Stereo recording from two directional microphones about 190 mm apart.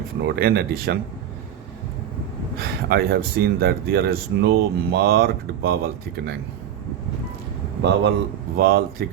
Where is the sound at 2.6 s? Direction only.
55° right (ahead or behind).